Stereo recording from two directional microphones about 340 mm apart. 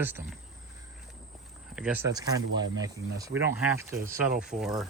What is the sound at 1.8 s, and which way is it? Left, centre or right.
Speech, centre.